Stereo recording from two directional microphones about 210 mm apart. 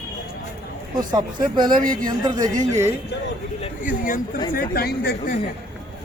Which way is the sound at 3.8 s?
40° left (ahead or behind).